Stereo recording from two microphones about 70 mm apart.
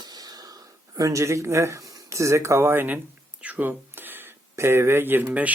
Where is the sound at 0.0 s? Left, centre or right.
Right.